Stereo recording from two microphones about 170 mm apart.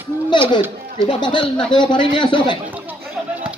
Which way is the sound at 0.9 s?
30° left (ahead or behind).